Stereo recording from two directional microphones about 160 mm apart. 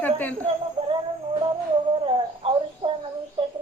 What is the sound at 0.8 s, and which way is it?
Music, 40° right (ahead or behind).